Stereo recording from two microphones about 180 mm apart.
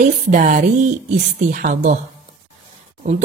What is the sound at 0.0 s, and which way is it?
Speech, 45° right (ahead or behind).